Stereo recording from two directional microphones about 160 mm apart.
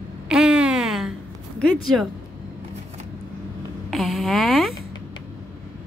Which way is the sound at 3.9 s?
Centre (ahead or behind).